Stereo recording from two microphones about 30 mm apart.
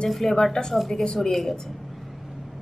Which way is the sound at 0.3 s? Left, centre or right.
Left.